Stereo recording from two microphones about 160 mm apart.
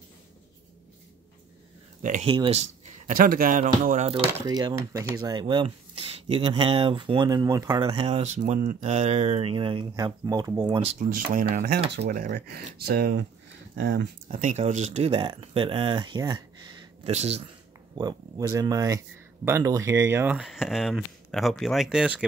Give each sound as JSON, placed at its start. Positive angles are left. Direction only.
{"t": 2.0, "sound": "speech", "side_deg": -55}
{"t": 2.2, "sound": "speech", "side_deg": -35}
{"t": 4.5, "sound": "speech", "side_deg": -25}
{"t": 7.8, "sound": "speech", "side_deg": -35}
{"t": 11.0, "sound": "speech", "side_deg": -60}
{"t": 11.9, "sound": "speech", "side_deg": -75}
{"t": 14.2, "sound": "speech", "side_deg": -50}
{"t": 17.0, "sound": "speech", "side_deg": -40}
{"t": 17.9, "sound": "speech", "side_deg": -25}
{"t": 20.3, "sound": "speech", "side_deg": 0}